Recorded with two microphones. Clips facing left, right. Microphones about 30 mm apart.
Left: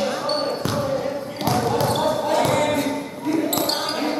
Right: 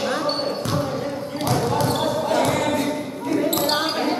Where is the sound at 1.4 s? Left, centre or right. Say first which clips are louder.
Left 1 dB; centre.